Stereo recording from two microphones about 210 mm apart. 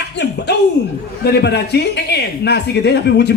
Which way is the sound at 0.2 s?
55° left (ahead or behind).